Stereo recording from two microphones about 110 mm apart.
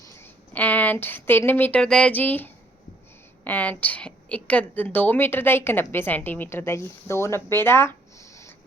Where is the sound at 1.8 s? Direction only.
5° left (ahead or behind).